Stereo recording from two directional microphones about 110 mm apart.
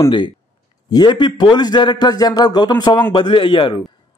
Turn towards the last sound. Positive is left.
turn(degrees=50)  # may be behind; listen again after turning